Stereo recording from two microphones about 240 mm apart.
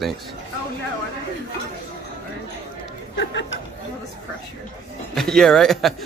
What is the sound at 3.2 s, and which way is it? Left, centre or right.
Speech, left.